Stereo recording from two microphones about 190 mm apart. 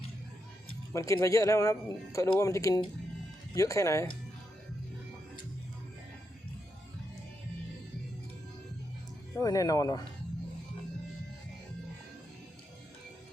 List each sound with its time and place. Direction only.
0.9 s speech: 15° left (ahead or behind)
9.3 s speech: 15° left (ahead or behind)